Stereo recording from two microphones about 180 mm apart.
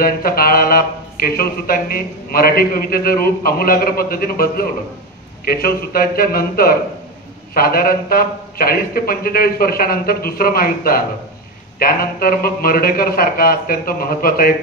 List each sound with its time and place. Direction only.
0.0 s speech: 55° left (ahead or behind)